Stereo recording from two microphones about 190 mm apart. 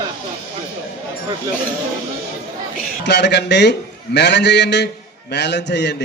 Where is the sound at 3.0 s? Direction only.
60° left (ahead or behind).